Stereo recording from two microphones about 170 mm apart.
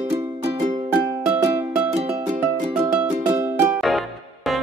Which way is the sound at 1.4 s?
15° right (ahead or behind).